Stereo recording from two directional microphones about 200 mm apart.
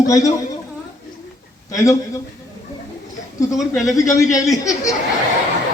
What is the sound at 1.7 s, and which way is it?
Speech, 15° left (ahead or behind).